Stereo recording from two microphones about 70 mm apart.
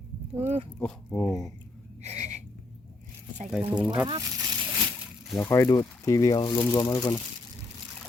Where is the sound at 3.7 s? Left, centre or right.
Centre.